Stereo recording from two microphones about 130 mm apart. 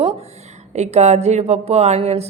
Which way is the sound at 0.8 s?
60° right (ahead or behind).